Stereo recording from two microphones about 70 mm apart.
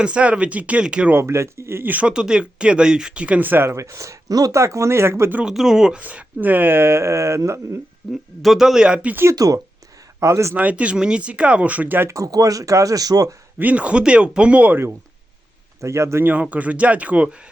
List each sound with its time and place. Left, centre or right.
0.0 s speech: centre
1.1 s speech: right
1.9 s speech: centre; by 5.3 s right
5.5 s speech: centre
6.0 s speech: right
8.1 s speech: centre
9.3 s speech: right
10.2 s a man's voice: right
10.5 s speech: right
12.0 s speech: right
13.6 s speech: right
15.8 s a man's voice: right
16.2 s speech: right